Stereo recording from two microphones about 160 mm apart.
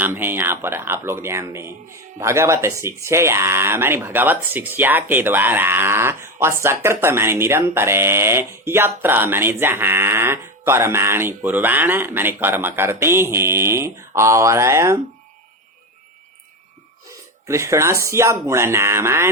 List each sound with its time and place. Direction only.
0.0 s speech: 15° right (ahead or behind)
17.4 s speech: 20° right (ahead or behind)